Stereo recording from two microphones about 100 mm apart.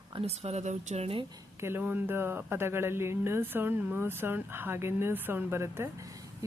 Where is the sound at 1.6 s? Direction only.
20° right (ahead or behind).